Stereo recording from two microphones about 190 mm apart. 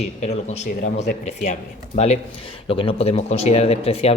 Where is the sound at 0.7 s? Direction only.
45° left (ahead or behind).